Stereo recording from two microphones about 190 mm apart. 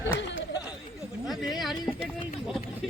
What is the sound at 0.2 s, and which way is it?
Chatter, 70° left (ahead or behind).